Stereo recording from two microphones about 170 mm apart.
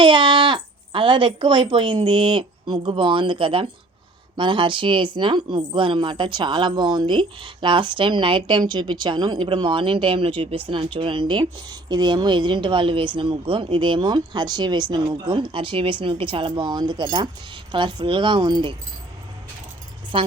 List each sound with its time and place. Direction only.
0.0 s speech: 30° right (ahead or behind)
20.1 s speech: 30° right (ahead or behind)